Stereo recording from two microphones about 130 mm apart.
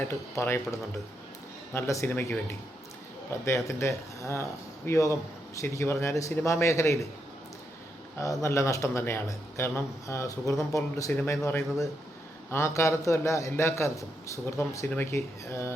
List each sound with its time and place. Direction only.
0.1 s a man's voice: 20° left (ahead or behind)
3.4 s a man's voice: 20° left (ahead or behind)
8.2 s a man's voice: 25° left (ahead or behind)